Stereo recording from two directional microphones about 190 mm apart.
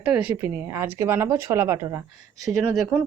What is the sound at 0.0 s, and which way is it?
Speech, 5° right (ahead or behind).